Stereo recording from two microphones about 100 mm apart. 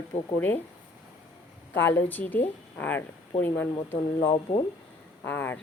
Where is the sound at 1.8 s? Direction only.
20° left (ahead or behind).